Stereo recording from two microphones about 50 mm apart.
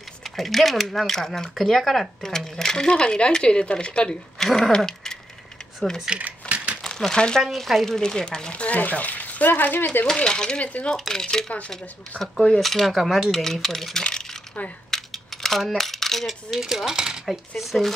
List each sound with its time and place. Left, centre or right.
0.2 s speech: centre; by 4.1 s left
4.4 s speech: centre
4.7 s dog: centre
6.1 s speech: centre
6.5 s crumpling: right
7.1 s speech: centre
7.5 s speech: centre; by 8.7 s left
8.7 s speech: left
10.1 s speech: centre
10.6 s dishes: left
11.1 s speech: centre
14.0 s coin: centre
15.4 s speech: centre
17.3 s speech: centre